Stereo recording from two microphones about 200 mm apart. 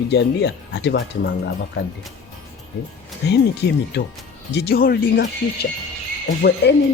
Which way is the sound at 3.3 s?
55° left (ahead or behind).